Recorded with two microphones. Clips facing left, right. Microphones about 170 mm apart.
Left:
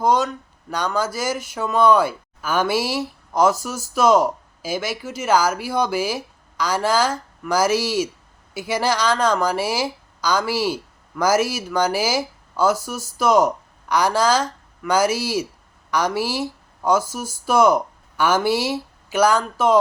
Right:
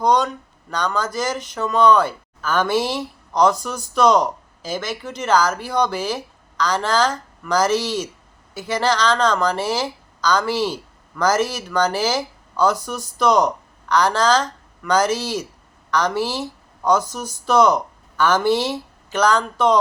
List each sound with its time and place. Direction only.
0.0 s speech: 5° left (ahead or behind)